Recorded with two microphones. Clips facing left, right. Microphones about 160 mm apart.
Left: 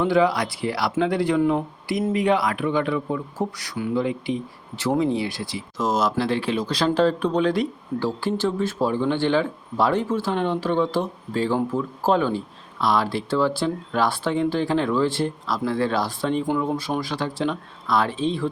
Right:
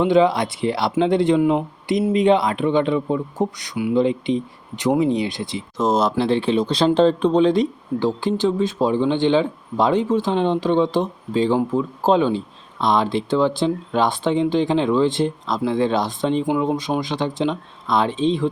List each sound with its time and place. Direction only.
0.0 s speech: 20° right (ahead or behind)